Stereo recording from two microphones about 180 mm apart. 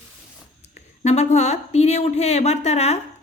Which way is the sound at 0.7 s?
40° left (ahead or behind).